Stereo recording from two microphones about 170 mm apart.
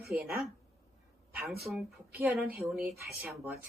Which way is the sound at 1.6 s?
5° right (ahead or behind).